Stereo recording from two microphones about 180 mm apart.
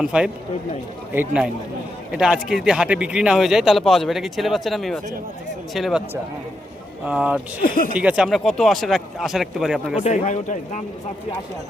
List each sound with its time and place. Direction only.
0.0 s speech: 5° right (ahead or behind)
7.0 s speech: 5° right (ahead or behind)
7.6 s speech: 50° left (ahead or behind)
7.9 s speech: 5° right (ahead or behind)
10.0 s speech: 40° left (ahead or behind)